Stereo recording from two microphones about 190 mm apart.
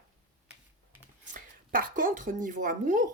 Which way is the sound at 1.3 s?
45° right (ahead or behind).